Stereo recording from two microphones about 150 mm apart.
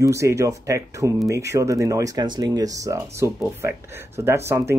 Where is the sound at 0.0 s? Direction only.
20° right (ahead or behind).